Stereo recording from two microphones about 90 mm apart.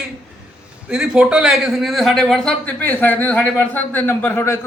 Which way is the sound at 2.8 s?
20° left (ahead or behind).